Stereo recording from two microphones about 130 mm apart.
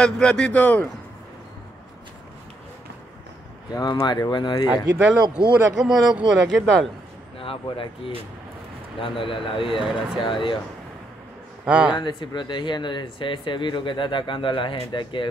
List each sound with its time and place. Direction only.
0.0 s speech: 5° left (ahead or behind)
3.7 s speech: 30° left (ahead or behind)
4.8 s a man's voice: 10° right (ahead or behind)
7.3 s speech: 45° left (ahead or behind)
9.8 s speech: 5° right (ahead or behind)
10.2 s speech: 40° left (ahead or behind)
11.6 s a man's voice: 5° right (ahead or behind)
12.0 s speech: 35° left (ahead or behind)